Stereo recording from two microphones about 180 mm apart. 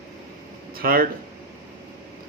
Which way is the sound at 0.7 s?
55° right (ahead or behind).